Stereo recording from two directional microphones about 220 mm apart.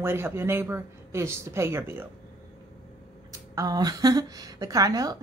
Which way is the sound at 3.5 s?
15° right (ahead or behind).